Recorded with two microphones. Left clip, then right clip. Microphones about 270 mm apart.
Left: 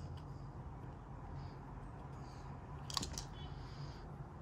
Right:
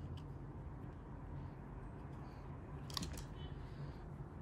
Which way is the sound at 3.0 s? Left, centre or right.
Centre.